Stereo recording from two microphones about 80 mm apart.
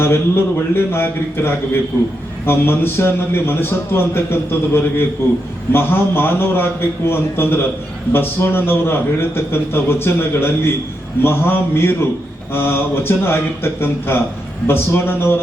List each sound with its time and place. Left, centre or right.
0.0 s a man's voice: left